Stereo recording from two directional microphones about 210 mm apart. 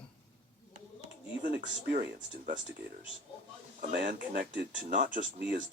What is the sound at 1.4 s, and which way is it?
Speech, 45° right (ahead or behind).